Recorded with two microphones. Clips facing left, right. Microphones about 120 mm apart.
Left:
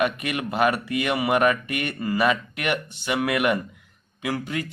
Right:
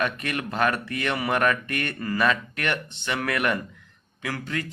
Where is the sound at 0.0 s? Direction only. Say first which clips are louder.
Left 3 dB; 15° left (ahead or behind).